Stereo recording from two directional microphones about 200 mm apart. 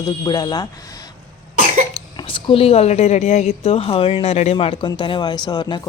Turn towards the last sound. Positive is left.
turn(degrees=20)  # may be behind; listen again after turning